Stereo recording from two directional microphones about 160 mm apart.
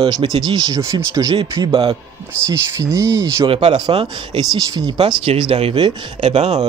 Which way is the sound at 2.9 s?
20° right (ahead or behind).